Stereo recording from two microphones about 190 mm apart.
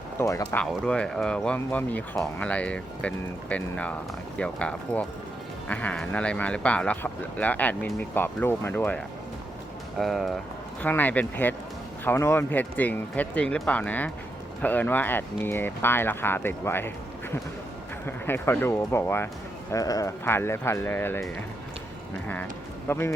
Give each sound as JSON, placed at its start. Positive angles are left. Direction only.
{"t": 0.2, "sound": "speech", "side_deg": 15}
{"t": 0.6, "sound": "speech", "side_deg": 5}
{"t": 10.0, "sound": "speech", "side_deg": 0}
{"t": 18.0, "sound": "speech", "side_deg": 10}
{"t": 22.9, "sound": "speech", "side_deg": 10}